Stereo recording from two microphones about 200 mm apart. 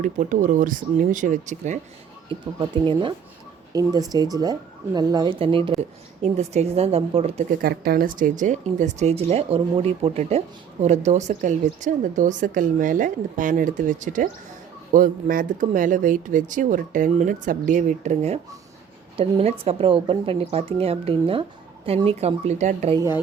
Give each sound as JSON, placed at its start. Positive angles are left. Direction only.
{"t": 0.0, "sound": "speech", "side_deg": -40}
{"t": 2.6, "sound": "a woman's voice", "side_deg": -25}
{"t": 7.6, "sound": "a woman's voice", "side_deg": -50}
{"t": 23.0, "sound": "speech", "side_deg": -15}